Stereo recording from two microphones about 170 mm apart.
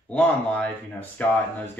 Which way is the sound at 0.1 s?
5° left (ahead or behind).